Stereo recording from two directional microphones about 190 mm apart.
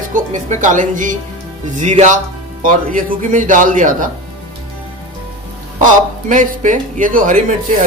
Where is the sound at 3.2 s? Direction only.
45° right (ahead or behind).